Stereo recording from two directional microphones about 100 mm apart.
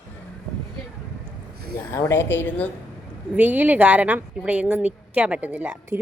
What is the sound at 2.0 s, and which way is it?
Speech, 25° left (ahead or behind).